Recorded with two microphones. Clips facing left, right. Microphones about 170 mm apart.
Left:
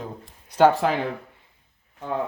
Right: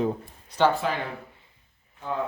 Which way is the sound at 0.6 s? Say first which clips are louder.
Left 5 dB; 65° left (ahead or behind).